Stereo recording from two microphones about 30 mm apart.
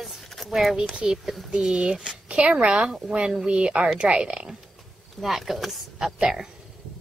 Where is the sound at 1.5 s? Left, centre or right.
Right.